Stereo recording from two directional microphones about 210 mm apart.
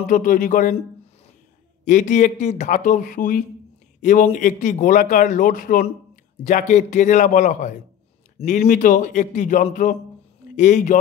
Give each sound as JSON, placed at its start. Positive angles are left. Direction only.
{"t": 0.1, "sound": "speech", "side_deg": 35}
{"t": 1.9, "sound": "speech", "side_deg": 35}